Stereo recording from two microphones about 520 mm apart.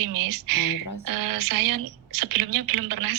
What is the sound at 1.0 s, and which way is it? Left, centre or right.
A woman's voice, right.